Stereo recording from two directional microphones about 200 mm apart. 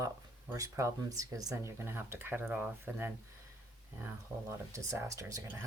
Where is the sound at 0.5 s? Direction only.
15° right (ahead or behind).